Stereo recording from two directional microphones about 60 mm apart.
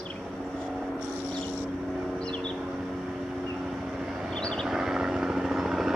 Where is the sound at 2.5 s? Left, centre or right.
Centre.